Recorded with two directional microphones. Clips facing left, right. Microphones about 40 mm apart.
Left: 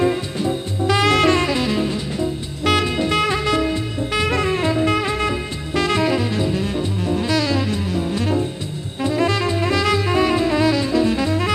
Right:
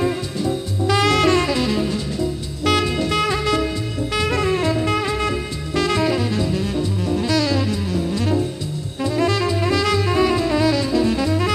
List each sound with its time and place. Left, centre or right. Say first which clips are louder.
0.8 s saxophone: left 1 dB; left
2.6 s music: left 1 dB; left
4.1 s saxophone: even; left
7.2 s music: right 1 dB; left
9.1 s saxophone: even; left